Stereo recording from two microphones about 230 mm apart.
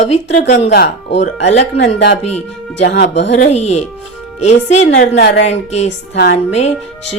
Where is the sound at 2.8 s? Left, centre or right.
Left.